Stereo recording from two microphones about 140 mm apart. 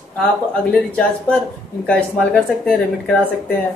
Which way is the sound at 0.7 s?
5° left (ahead or behind).